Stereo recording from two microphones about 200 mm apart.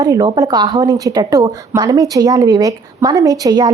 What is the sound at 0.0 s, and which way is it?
A woman's voice, 20° right (ahead or behind).